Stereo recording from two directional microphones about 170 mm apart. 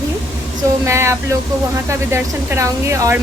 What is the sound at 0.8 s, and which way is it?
Speech, 15° right (ahead or behind).